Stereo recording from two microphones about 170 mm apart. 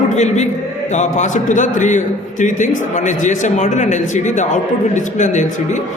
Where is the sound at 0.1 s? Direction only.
45° left (ahead or behind).